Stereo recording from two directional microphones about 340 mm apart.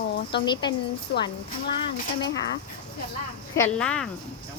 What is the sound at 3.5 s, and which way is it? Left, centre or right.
Speech, centre.